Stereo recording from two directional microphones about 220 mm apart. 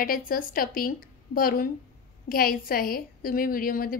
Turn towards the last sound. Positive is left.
turn(degrees=40)  # may be behind; listen again after turning